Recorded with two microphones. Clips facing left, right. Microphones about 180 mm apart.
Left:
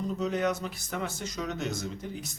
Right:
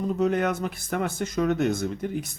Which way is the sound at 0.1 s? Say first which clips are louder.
Right 5 dB; 60° right (ahead or behind).